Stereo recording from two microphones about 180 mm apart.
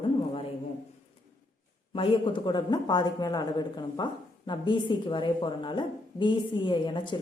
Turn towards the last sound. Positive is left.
turn(degrees=25)  # may be behind; listen again after turning